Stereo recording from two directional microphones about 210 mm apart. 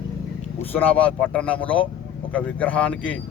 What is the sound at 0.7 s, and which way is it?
Speech, 10° left (ahead or behind).